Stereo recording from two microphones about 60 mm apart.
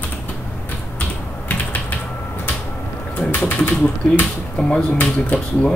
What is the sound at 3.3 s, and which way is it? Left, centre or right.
Typing, left.